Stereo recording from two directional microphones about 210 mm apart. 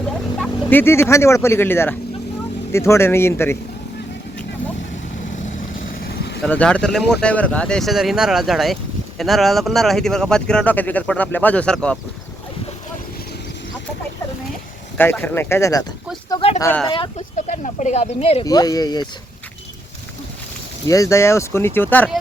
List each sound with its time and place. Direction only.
0.3 s speech: 5° left (ahead or behind)
5.5 s vehicle: 45° left (ahead or behind)
6.4 s speech: 5° left (ahead or behind)
14.9 s speech: 10° left (ahead or behind)
16.3 s a sound: 25° left (ahead or behind)
16.6 s speech: 10° left (ahead or behind)
16.9 s speech: 30° left (ahead or behind)
18.4 s speech: 15° left (ahead or behind)
20.8 s speech: 15° left (ahead or behind)